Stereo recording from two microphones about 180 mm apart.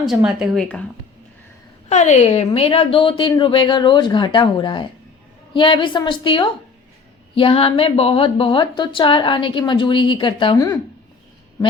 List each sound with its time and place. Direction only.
0.0 s a woman's voice: centre (ahead or behind)
1.9 s a woman's voice: 40° left (ahead or behind); by 10.8 s 25° left (ahead or behind)